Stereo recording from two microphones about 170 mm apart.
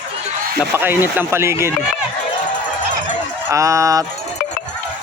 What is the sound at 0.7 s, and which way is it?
Speech, 10° right (ahead or behind).